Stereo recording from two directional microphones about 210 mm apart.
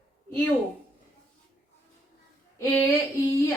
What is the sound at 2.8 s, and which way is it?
Female singing, 15° left (ahead or behind).